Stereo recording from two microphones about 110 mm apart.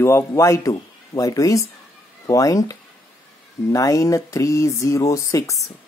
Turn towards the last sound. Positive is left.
turn(degrees=30)  # may be behind; listen again after turning